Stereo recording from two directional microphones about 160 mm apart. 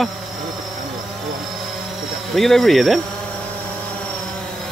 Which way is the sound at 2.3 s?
Centre (ahead or behind).